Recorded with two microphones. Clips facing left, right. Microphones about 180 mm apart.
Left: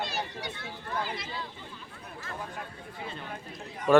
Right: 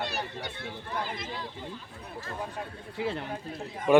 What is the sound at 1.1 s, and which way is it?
Speech, 50° right (ahead or behind).